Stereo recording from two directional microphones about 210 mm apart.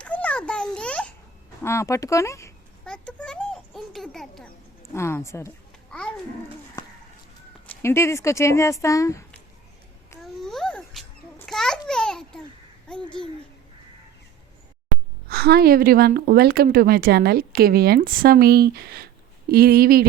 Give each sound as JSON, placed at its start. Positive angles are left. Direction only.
{"t": 0.0, "sound": "a sound", "side_deg": 5}
{"t": 1.6, "sound": "speech", "side_deg": 15}
{"t": 2.8, "sound": "a sound", "side_deg": 5}
{"t": 4.9, "sound": "speech", "side_deg": 15}
{"t": 5.9, "sound": "babbling", "side_deg": 5}
{"t": 6.8, "sound": "bird", "side_deg": 15}
{"t": 7.7, "sound": "speech", "side_deg": 10}
{"t": 10.4, "sound": "babbling", "side_deg": 0}
{"t": 12.9, "sound": "a child's voice", "side_deg": 5}
{"t": 15.3, "sound": "a woman's voice", "side_deg": -45}